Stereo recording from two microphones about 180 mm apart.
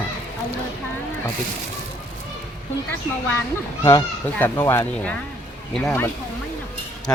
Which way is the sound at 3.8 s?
15° left (ahead or behind).